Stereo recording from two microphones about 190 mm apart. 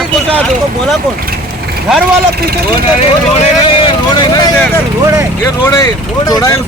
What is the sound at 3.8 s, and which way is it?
Vehicle, 20° left (ahead or behind).